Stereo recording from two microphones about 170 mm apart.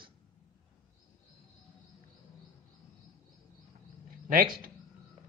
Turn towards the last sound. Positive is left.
turn(degrees=-55)  # may be behind; listen again after turning